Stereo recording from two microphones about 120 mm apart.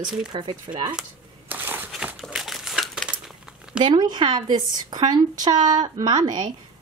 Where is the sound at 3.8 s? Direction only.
40° right (ahead or behind).